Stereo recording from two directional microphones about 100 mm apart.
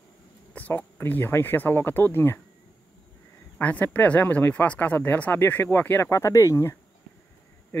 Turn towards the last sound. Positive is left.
turn(degrees=30)  # may be behind; listen again after turning